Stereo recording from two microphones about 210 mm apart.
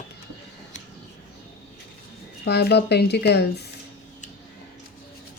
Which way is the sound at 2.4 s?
50° left (ahead or behind).